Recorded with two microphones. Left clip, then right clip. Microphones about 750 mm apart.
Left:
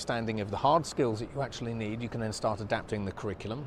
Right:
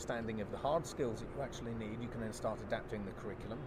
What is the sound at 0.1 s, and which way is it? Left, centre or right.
A man's voice, left.